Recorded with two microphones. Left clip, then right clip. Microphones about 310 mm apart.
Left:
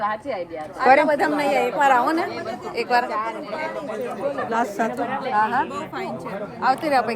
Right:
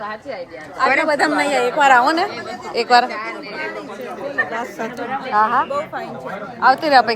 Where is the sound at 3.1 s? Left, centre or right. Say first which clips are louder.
Left 1 dB; left.